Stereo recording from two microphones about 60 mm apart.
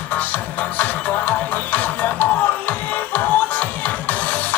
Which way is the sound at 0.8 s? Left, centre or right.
Left.